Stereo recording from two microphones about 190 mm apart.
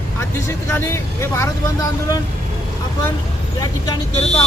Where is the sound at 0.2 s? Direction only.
15° left (ahead or behind).